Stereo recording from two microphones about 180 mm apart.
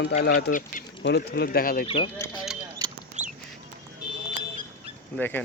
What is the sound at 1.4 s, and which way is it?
Speech, 55° left (ahead or behind).